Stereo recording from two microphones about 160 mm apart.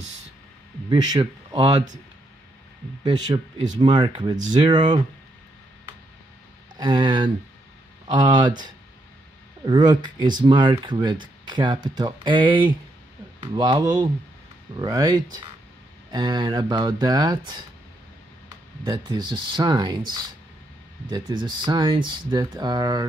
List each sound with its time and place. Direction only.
0.8 s speech: 25° right (ahead or behind)
3.0 s speech: 25° right (ahead or behind)
6.8 s speech: 25° right (ahead or behind)
18.9 s speech: 25° right (ahead or behind)